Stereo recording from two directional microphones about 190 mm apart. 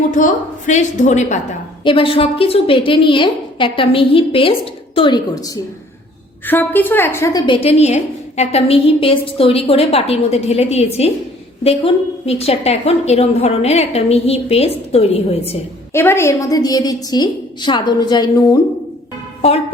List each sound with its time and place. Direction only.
0.2 s a woman's voice: 40° left (ahead or behind)
1.8 s a woman's voice: 25° left (ahead or behind)
6.4 s a woman's voice: 10° left (ahead or behind); by 15.5 s 30° left (ahead or behind)
15.9 s a woman's voice: 15° left (ahead or behind)